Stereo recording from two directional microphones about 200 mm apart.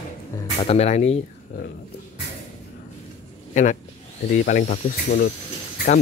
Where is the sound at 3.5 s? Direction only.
40° left (ahead or behind).